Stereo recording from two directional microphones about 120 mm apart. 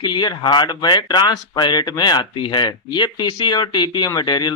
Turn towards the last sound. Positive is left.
turn(degrees=35)  # may be behind; listen again after turning